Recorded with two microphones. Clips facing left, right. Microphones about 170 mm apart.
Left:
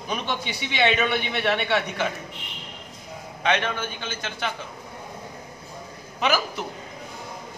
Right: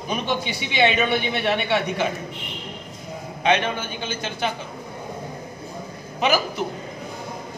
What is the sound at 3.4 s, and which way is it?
A man's voice, 15° right (ahead or behind).